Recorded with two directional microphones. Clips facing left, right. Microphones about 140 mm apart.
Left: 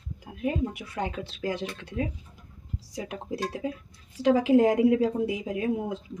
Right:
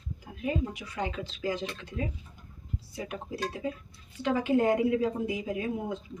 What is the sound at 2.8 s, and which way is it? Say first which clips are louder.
Speech: left 3 dB; 90° left.